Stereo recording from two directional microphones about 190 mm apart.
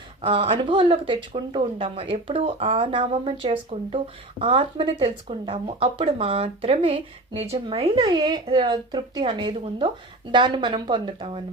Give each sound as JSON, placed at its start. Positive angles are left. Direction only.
{"t": 0.2, "sound": "speech", "side_deg": -30}